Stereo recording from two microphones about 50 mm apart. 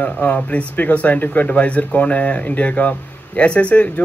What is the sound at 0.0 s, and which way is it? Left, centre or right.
Speech, left.